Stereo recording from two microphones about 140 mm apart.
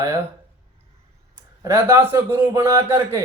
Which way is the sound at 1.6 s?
20° right (ahead or behind).